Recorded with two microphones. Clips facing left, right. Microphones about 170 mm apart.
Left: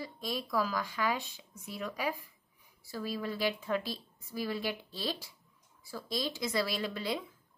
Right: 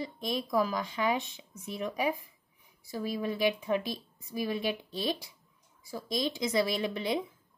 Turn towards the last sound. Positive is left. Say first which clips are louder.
# right 4 dB
turn(degrees=-20)  # may be behind; listen again after turning